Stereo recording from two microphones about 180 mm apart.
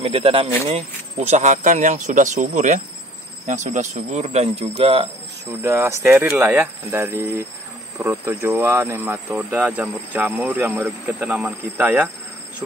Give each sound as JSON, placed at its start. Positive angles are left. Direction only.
{"t": 0.0, "sound": "speech", "side_deg": -30}
{"t": 5.5, "sound": "speech", "side_deg": -10}